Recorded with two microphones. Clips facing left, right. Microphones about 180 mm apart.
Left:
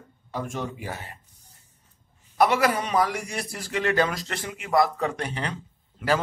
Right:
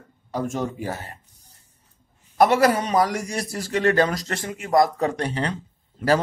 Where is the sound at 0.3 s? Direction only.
40° right (ahead or behind).